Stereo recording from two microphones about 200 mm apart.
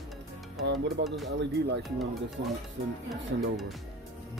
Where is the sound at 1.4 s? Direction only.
60° right (ahead or behind).